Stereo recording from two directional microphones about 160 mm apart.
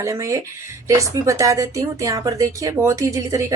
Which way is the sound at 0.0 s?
20° right (ahead or behind).